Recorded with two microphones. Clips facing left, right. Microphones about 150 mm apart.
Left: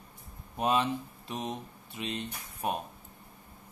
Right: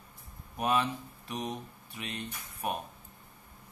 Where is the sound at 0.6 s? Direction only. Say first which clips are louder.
Left 2 dB; 25° left (ahead or behind).